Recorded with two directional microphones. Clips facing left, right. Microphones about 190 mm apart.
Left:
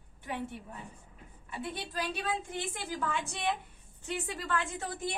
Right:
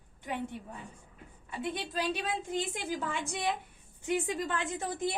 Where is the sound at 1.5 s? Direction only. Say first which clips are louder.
Right 3 dB; 15° right (ahead or behind).